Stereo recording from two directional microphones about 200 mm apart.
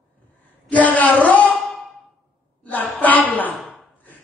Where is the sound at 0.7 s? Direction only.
10° left (ahead or behind).